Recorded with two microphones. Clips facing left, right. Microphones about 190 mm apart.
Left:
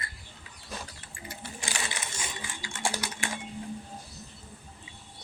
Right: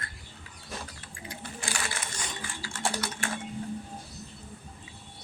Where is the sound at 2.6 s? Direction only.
15° left (ahead or behind).